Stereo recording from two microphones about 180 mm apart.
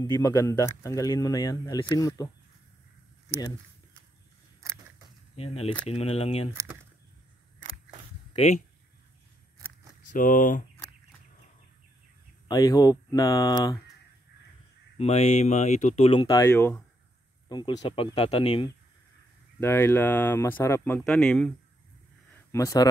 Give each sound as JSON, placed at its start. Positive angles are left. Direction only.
{"t": 0.0, "sound": "speech", "side_deg": 20}
{"t": 4.6, "sound": "a sound", "side_deg": -20}
{"t": 5.3, "sound": "speech", "side_deg": 35}
{"t": 6.5, "sound": "speech", "side_deg": -15}
{"t": 8.3, "sound": "speech", "side_deg": 35}
{"t": 10.1, "sound": "speech", "side_deg": 50}
{"t": 12.4, "sound": "speech", "side_deg": 20}
{"t": 15.0, "sound": "speech", "side_deg": 35}
{"t": 17.5, "sound": "speech", "side_deg": 25}
{"t": 19.6, "sound": "speech", "side_deg": 15}
{"t": 22.5, "sound": "speech", "side_deg": 15}